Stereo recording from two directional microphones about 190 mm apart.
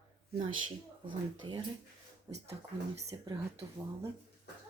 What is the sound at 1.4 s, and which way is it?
Speech, 25° right (ahead or behind).